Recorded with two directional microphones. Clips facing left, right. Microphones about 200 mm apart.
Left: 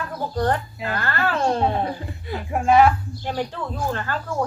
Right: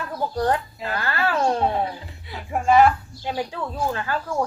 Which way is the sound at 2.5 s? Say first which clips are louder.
Even; centre (ahead or behind).